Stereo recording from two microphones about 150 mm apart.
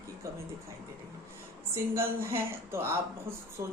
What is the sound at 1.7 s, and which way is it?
A woman's voice, 15° right (ahead or behind).